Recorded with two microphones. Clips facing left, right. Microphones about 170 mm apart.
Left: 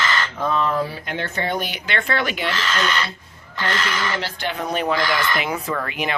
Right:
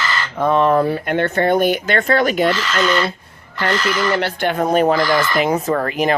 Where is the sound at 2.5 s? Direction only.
Centre (ahead or behind).